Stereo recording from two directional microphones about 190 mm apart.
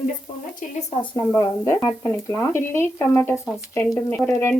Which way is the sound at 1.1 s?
15° left (ahead or behind).